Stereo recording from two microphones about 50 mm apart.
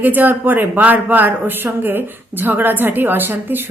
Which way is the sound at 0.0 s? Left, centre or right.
Right.